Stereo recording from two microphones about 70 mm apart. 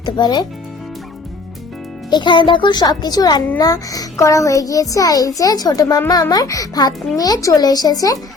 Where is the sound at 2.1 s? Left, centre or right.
Left.